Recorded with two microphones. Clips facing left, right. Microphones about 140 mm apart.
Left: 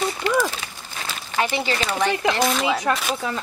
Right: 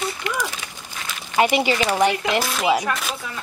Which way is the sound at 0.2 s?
30° left (ahead or behind).